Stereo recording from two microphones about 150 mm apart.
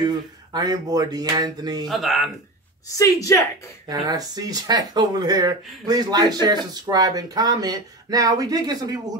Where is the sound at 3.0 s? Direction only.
20° left (ahead or behind).